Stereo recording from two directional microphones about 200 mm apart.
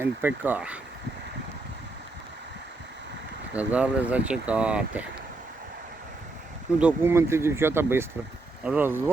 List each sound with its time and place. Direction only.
0.0 s speech: 10° right (ahead or behind)
3.5 s speech: 5° right (ahead or behind)
6.7 s speech: 10° right (ahead or behind)